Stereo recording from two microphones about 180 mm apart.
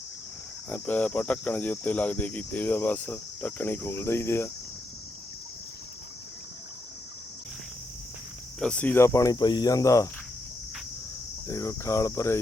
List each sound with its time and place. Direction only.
0.7 s cricket: 10° left (ahead or behind)
8.5 s cricket: 5° left (ahead or behind)
11.4 s cricket: 15° left (ahead or behind)